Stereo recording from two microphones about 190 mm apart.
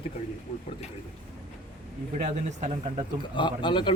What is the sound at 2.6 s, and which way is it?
Speech, 35° right (ahead or behind).